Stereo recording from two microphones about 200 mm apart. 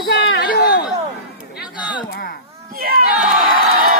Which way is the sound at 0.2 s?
60° left (ahead or behind).